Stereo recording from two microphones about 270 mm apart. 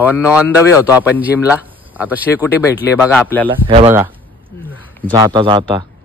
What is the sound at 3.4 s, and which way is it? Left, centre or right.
Speech, centre.